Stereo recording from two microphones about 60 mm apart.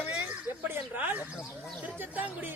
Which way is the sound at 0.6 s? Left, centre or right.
Right.